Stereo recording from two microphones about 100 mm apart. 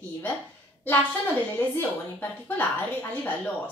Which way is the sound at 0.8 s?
20° left (ahead or behind).